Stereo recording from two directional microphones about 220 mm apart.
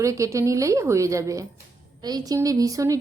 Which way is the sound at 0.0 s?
15° right (ahead or behind).